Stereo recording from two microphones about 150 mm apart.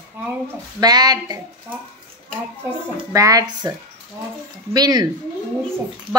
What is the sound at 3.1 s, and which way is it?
Speech, 20° right (ahead or behind).